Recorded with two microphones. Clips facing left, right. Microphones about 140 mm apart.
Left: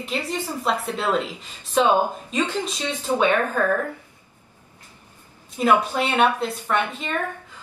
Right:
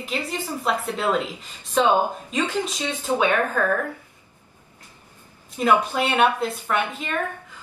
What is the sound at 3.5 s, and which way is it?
Speech, 10° left (ahead or behind).